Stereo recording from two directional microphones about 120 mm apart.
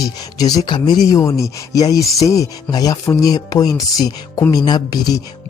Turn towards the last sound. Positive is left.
turn(degrees=35)  # may be behind; listen again after turning